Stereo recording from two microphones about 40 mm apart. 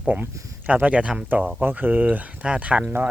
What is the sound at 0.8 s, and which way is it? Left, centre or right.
Speech, right.